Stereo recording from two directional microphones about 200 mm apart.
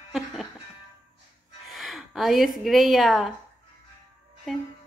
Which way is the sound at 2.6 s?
Centre (ahead or behind).